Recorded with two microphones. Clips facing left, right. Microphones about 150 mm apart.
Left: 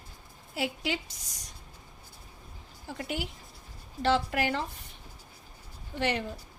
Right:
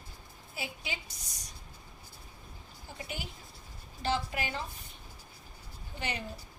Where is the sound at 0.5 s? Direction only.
85° left.